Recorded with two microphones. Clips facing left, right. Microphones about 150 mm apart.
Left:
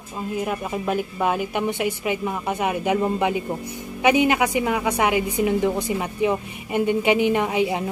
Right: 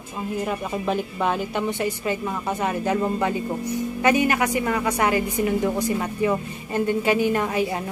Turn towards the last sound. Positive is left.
turn(degrees=15)  # may be behind; listen again after turning